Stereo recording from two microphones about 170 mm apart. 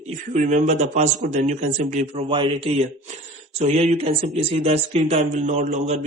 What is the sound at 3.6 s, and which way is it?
Speech, 40° right (ahead or behind).